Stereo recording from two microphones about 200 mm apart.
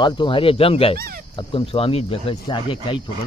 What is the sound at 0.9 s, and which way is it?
Speech, 50° right (ahead or behind).